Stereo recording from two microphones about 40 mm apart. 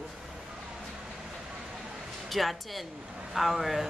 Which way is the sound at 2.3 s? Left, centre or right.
Centre.